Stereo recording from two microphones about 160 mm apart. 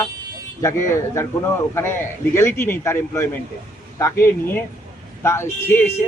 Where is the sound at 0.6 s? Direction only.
15° left (ahead or behind).